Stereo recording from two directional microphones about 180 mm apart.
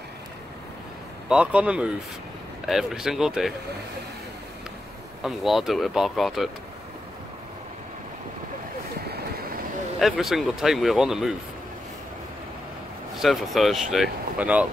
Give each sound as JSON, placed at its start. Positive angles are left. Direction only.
{"t": 1.3, "sound": "speech", "side_deg": -5}
{"t": 5.2, "sound": "speech", "side_deg": 0}
{"t": 9.0, "sound": "vehicle", "side_deg": -60}
{"t": 9.9, "sound": "speech", "side_deg": 0}
{"t": 13.2, "sound": "speech", "side_deg": 0}